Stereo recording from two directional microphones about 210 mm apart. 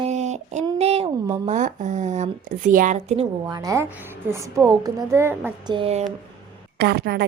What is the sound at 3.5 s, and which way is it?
A woman's voice, 15° right (ahead or behind).